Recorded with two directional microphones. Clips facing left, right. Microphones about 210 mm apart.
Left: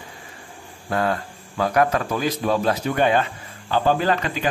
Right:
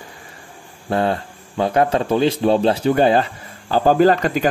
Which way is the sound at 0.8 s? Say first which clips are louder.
Right 4 dB; 25° right (ahead or behind).